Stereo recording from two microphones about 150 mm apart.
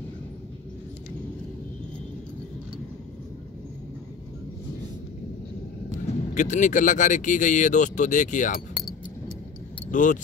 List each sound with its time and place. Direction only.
5.9 s speech: 55° left (ahead or behind)
9.8 s speech: 60° left (ahead or behind)